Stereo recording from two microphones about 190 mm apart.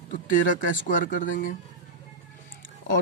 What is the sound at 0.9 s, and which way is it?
Speech, 45° left (ahead or behind).